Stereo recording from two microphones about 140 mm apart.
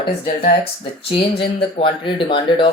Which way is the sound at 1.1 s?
40° left (ahead or behind).